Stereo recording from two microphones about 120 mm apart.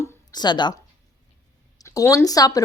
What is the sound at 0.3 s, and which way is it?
Speech, 40° left (ahead or behind).